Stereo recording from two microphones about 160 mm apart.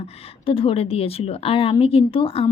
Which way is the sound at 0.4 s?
35° left (ahead or behind).